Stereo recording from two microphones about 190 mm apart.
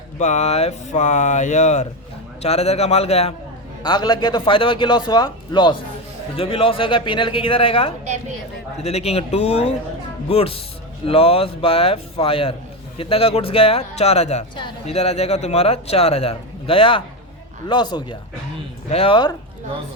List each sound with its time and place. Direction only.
0.2 s speech: 40° left (ahead or behind)
3.8 s speech: 20° left (ahead or behind)